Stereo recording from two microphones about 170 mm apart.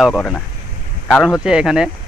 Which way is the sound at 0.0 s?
5° left (ahead or behind).